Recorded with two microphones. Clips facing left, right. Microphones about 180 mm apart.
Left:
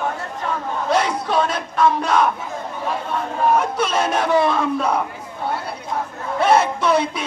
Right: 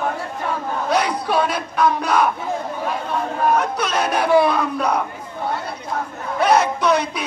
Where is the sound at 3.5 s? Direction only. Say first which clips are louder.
Left 1 dB; 5° left (ahead or behind).